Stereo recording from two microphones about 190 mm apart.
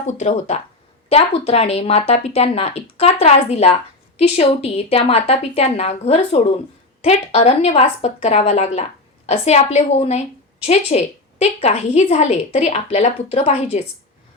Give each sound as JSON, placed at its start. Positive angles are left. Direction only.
{"t": 0.2, "sound": "a woman's voice", "side_deg": 35}